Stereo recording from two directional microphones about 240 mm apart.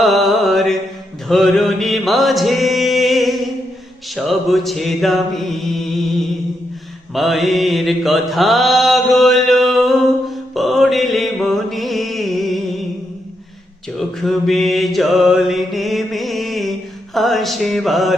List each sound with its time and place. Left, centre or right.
0.0 s mantra: centre
7.1 s mantra: centre
13.9 s mantra: centre